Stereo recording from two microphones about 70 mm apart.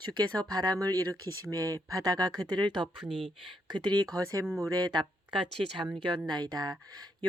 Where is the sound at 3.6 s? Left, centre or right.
Right.